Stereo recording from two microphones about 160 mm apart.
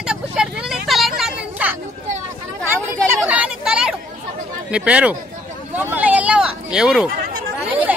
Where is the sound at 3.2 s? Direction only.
10° right (ahead or behind).